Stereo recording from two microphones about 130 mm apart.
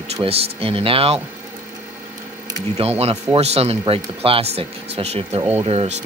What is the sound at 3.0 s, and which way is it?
Speech, 55° right (ahead or behind).